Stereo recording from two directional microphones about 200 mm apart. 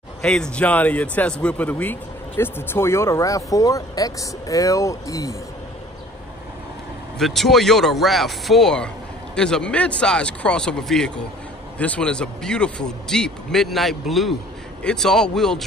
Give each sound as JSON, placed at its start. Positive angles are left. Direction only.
{"t": 0.2, "sound": "speech", "side_deg": 5}
{"t": 7.2, "sound": "speech", "side_deg": 0}